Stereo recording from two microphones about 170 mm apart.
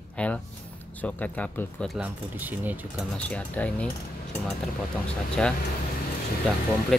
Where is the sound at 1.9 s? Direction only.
10° right (ahead or behind).